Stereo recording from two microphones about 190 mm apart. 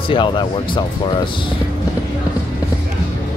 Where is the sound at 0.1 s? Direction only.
25° left (ahead or behind).